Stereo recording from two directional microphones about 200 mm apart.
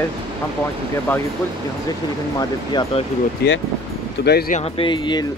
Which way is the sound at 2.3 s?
20° left (ahead or behind).